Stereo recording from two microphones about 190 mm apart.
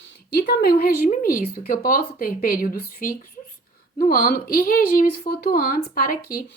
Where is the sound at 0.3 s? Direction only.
55° left (ahead or behind).